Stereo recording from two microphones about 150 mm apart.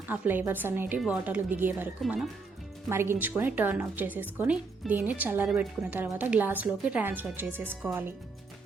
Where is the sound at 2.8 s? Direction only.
15° right (ahead or behind).